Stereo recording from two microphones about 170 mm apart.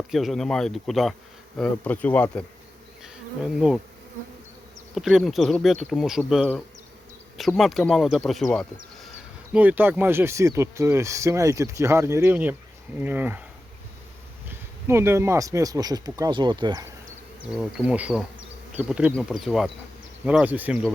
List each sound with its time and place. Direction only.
0.1 s speech: centre (ahead or behind)
3.0 s bee: 5° right (ahead or behind)
4.9 s speech: centre (ahead or behind)
9.5 s speech: 10° right (ahead or behind)
14.8 s speech: 15° right (ahead or behind)
17.4 s bee: 5° right (ahead or behind)
19.1 s speech: centre (ahead or behind)